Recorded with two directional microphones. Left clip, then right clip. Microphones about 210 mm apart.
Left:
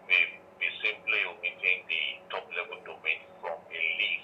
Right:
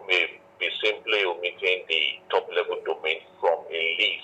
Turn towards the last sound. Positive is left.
turn(degrees=-55)  # may be behind; listen again after turning